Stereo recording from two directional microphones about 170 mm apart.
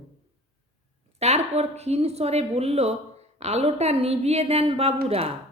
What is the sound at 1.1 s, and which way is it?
A woman's voice, 40° right (ahead or behind).